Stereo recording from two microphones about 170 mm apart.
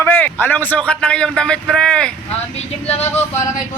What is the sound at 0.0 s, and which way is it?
A man's voice, 10° left (ahead or behind).